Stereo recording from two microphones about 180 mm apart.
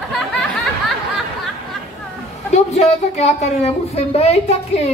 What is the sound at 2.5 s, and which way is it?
A woman's voice, 35° left (ahead or behind).